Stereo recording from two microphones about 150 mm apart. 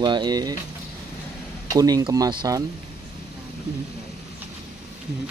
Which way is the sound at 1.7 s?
25° right (ahead or behind).